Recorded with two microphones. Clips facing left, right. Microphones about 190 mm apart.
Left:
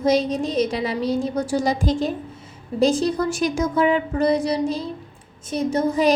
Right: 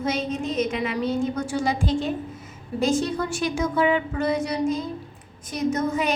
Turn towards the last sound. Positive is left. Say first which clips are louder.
# left 5 dB
turn(degrees=35)  # may be behind; listen again after turning